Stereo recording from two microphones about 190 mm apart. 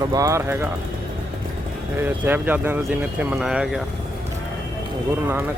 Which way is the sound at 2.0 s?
10° right (ahead or behind).